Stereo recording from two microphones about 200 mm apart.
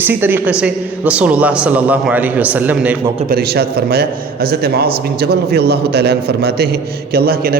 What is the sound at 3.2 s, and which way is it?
A man's voice, 50° right (ahead or behind).